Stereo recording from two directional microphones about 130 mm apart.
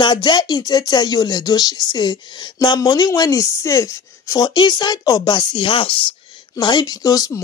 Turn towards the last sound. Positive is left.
turn(degrees=30)  # may be behind; listen again after turning